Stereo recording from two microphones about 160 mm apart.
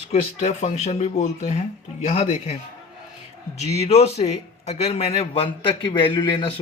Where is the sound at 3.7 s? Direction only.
40° left (ahead or behind).